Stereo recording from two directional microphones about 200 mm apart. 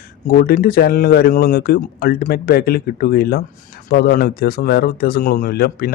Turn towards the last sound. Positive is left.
turn(degrees=50)  # may be behind; listen again after turning